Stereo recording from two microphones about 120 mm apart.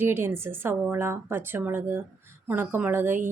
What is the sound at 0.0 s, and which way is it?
Speech, 20° right (ahead or behind).